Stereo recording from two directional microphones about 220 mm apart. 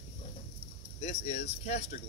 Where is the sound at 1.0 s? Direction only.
30° left (ahead or behind).